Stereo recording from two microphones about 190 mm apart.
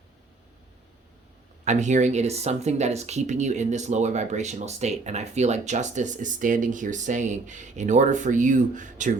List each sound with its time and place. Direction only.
1.6 s speech: 40° right (ahead or behind)